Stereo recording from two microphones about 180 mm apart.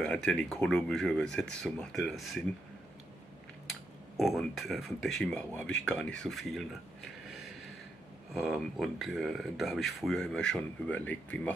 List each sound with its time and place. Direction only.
0.0 s speech: 5° left (ahead or behind)
4.2 s speech: centre (ahead or behind)
8.3 s speech: centre (ahead or behind)